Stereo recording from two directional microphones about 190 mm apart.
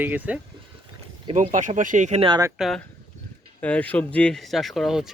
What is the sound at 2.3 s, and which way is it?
Speech, 20° right (ahead or behind).